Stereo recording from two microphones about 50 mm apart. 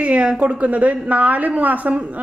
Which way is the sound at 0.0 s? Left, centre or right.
Right.